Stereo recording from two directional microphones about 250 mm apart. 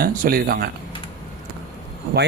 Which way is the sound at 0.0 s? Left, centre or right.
Right.